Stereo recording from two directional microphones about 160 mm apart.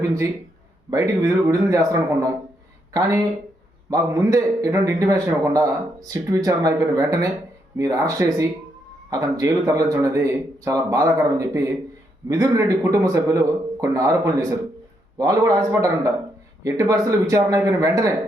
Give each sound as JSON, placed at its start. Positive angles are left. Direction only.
{"t": 0.0, "sound": "a man's voice", "side_deg": -20}